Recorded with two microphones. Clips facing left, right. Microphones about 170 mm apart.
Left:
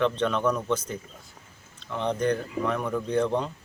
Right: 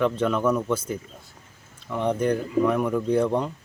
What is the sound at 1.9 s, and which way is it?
A man's voice, 10° right (ahead or behind).